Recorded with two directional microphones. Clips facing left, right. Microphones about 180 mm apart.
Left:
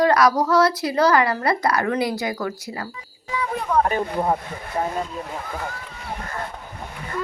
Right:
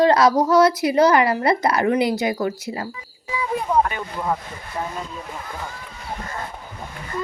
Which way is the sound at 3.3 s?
10° right (ahead or behind).